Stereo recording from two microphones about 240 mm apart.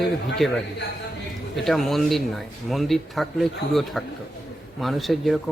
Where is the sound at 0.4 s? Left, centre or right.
Centre.